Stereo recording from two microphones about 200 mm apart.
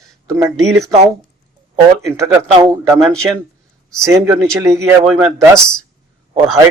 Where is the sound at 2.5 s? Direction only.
20° right (ahead or behind).